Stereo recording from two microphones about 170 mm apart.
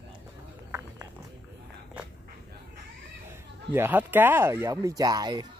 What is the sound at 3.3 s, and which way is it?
Speech, 15° right (ahead or behind).